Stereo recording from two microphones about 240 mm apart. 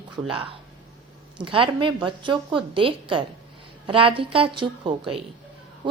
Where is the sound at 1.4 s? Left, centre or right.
Right.